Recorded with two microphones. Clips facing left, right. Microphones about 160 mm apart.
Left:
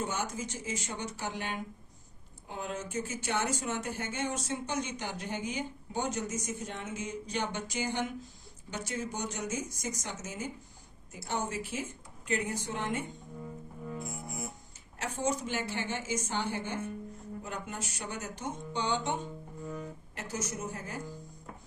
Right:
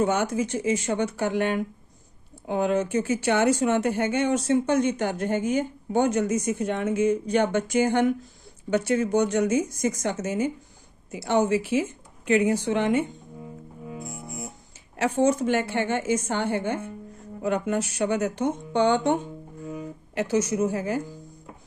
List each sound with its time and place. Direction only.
0.0 s speech: 70° right (ahead or behind)
2.5 s speech: 80° right; by 8.1 s 55° right (ahead or behind)
8.7 s speech: 65° right (ahead or behind)
11.1 s speech: 80° right
14.9 s speech: 70° right (ahead or behind)
17.4 s speech: 75° right (ahead or behind)
19.2 s music: 10° right (ahead or behind)
20.1 s a woman's voice: 80° right